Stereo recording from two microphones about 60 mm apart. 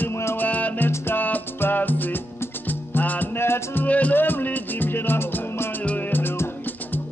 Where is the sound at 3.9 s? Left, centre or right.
Left.